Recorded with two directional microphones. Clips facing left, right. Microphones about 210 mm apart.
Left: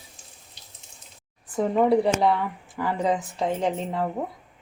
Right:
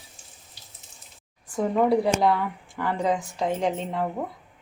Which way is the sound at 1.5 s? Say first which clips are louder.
Left 1 dB; centre (ahead or behind).